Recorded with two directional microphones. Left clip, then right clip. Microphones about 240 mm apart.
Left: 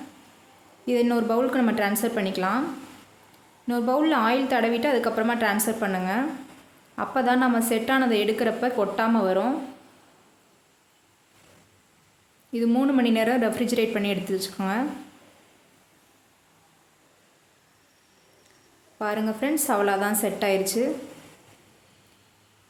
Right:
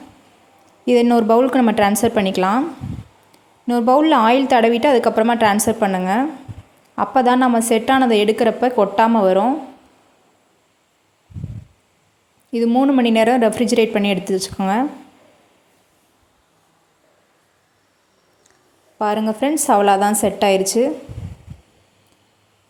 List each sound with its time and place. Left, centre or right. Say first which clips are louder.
0.9 s a woman's voice: right 9 dB; right
3.7 s a woman's voice: right 9 dB; right
12.5 s a woman's voice: right 8 dB; right
18.9 s a woman's voice: right 8 dB; right